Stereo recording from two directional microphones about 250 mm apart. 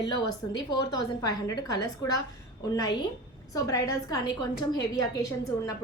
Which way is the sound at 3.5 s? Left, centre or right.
Centre.